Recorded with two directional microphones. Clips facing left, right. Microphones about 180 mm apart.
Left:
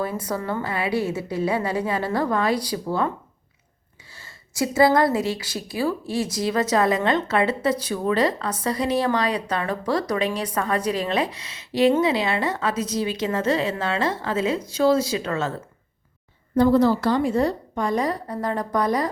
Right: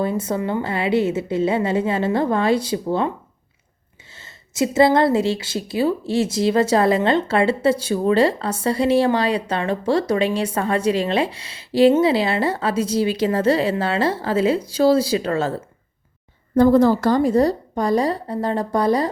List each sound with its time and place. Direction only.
0.0 s a woman's voice: 25° right (ahead or behind)
4.1 s a woman's voice: 25° right (ahead or behind)
16.6 s a woman's voice: 50° right (ahead or behind); by 19.1 s 30° right (ahead or behind)